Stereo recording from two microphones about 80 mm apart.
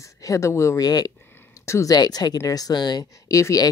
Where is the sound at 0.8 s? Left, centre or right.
Left.